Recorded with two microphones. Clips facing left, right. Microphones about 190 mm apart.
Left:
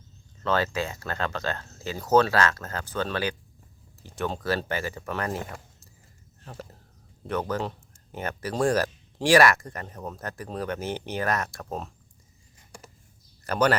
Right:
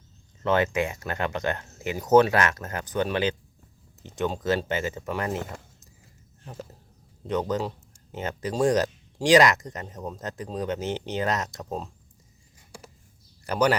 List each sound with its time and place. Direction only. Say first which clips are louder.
0.4 s speech: right 3 dB; 20° right (ahead or behind)
7.3 s a man's voice: right 2 dB; 20° right (ahead or behind)
13.4 s speech: even; 10° right (ahead or behind)